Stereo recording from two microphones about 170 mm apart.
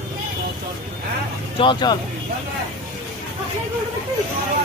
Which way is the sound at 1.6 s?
25° left (ahead or behind).